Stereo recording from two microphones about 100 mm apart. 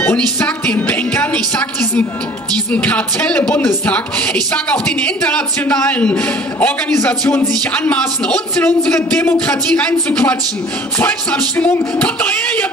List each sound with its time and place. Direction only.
0.0 s music: 20° left (ahead or behind)
2.7 s a woman's voice: 15° left (ahead or behind)
7.7 s a woman's voice: 15° left (ahead or behind)